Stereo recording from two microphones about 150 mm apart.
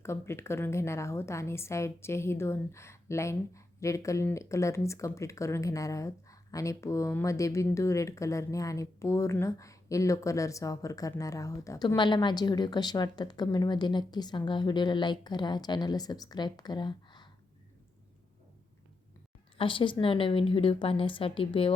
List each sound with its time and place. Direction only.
0.0 s a woman's voice: 20° left (ahead or behind)
19.5 s a woman's voice: 35° left (ahead or behind)